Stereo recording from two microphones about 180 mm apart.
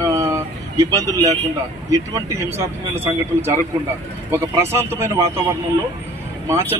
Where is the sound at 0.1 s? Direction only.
15° right (ahead or behind).